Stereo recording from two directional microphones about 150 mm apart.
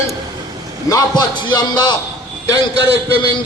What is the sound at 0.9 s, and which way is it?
A man's voice, 25° left (ahead or behind).